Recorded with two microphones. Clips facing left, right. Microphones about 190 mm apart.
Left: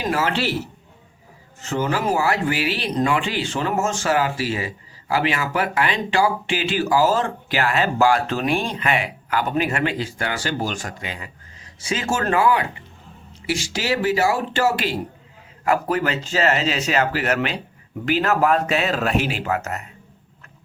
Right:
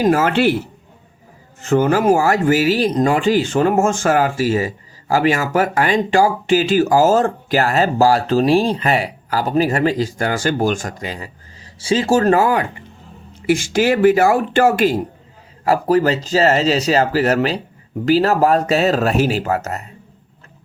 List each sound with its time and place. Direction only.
0.0 s speech: 45° right (ahead or behind)
1.6 s speech: 50° right (ahead or behind)
15.6 s speech: 35° right (ahead or behind)